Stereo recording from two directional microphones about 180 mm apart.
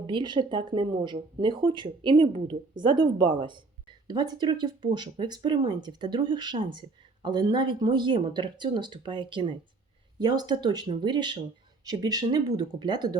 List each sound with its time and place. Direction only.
0.1 s speech: 25° right (ahead or behind)